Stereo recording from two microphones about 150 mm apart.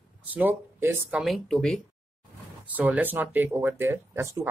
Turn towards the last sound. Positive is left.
turn(degrees=-15)  # may be behind; listen again after turning